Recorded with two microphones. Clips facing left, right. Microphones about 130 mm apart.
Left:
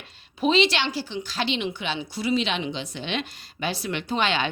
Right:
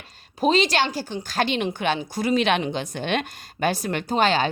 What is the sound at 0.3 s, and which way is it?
A woman's voice, 40° right (ahead or behind).